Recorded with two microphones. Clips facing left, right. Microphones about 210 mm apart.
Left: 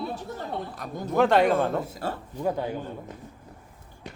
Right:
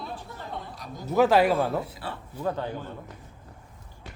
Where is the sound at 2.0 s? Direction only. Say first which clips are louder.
Left 5 dB; 45° left (ahead or behind).